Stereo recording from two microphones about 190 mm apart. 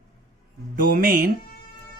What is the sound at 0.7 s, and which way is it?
Speech, 45° right (ahead or behind).